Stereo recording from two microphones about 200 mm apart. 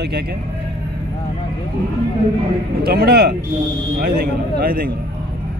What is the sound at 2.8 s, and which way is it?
A man's voice, 50° right (ahead or behind).